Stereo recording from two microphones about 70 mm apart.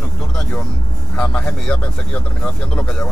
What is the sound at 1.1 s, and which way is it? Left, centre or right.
Speech, centre.